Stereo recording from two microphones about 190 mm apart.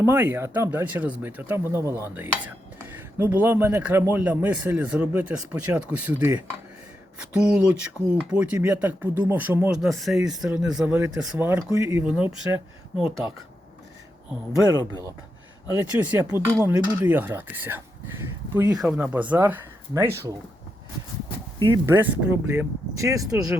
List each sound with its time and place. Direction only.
0.0 s speech: 10° right (ahead or behind)
15.7 s speech: 10° right (ahead or behind)
21.6 s speech: 15° right (ahead or behind)